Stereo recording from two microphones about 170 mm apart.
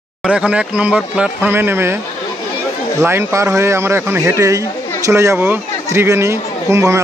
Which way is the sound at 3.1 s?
15° right (ahead or behind).